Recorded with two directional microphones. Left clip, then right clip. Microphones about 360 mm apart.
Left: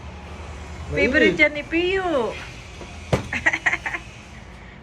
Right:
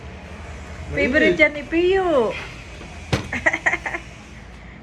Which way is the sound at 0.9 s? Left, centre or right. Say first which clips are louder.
Right 1 dB; centre.